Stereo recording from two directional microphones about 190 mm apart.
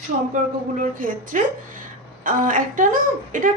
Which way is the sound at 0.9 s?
45° right (ahead or behind).